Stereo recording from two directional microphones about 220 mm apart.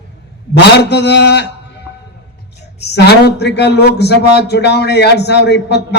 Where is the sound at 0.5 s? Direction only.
50° left (ahead or behind).